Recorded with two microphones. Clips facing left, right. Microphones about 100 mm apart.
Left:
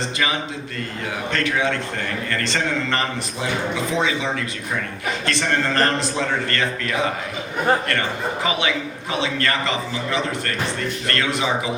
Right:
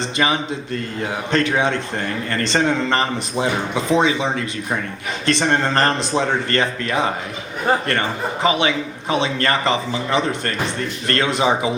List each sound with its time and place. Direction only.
1.3 s a man's voice: 20° right (ahead or behind)